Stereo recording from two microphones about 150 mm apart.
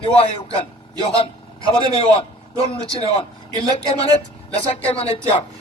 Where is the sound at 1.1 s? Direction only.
35° left (ahead or behind).